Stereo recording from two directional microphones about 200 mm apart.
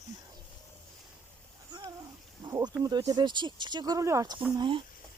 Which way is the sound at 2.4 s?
20° right (ahead or behind).